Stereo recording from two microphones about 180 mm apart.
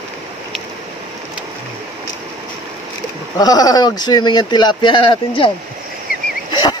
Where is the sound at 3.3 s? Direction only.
20° left (ahead or behind).